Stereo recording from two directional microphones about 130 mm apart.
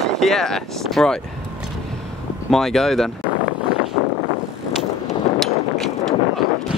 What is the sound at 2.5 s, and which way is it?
Speech, 5° left (ahead or behind).